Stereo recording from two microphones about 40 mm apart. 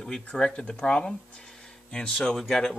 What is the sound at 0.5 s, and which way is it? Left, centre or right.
Speech, left.